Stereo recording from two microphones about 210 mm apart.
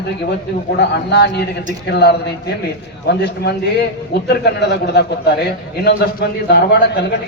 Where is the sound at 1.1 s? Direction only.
55° left (ahead or behind).